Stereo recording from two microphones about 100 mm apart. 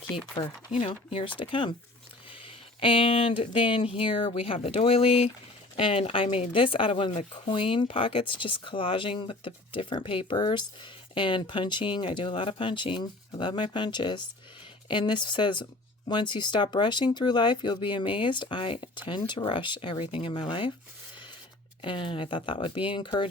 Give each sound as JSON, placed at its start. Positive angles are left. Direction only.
{"t": 0.8, "sound": "speech", "side_deg": 65}
{"t": 5.7, "sound": "speech", "side_deg": 70}
{"t": 21.8, "sound": "speech", "side_deg": 60}